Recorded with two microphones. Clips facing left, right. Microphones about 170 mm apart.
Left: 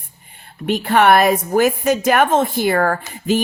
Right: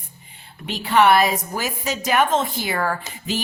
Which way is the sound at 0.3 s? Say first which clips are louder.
Left 10 dB; 55° left (ahead or behind).